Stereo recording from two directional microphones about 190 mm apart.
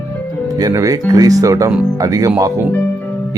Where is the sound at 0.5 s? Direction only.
20° right (ahead or behind).